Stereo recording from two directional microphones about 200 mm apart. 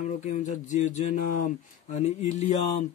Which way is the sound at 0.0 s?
40° left (ahead or behind).